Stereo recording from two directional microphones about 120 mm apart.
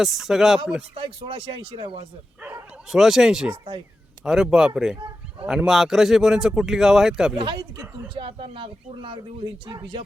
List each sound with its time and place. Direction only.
0.0 s speech: 5° right (ahead or behind)
0.9 s speech: 45° right (ahead or behind)
2.4 s bow-wow: 20° right (ahead or behind)
2.9 s speech: 5° right (ahead or behind)
4.9 s fowl: 35° right (ahead or behind)
5.5 s speech: 5° right (ahead or behind)
7.3 s speech: 45° right (ahead or behind)
9.6 s speech: 35° right (ahead or behind)